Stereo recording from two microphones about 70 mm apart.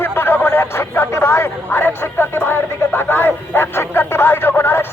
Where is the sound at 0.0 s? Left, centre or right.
Left.